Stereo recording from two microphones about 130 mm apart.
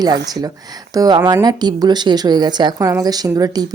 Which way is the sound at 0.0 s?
30° right (ahead or behind).